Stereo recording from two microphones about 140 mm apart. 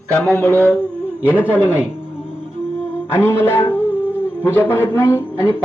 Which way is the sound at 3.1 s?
15° left (ahead or behind).